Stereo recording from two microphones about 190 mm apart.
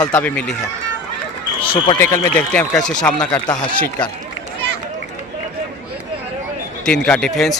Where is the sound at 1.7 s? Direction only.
20° left (ahead or behind).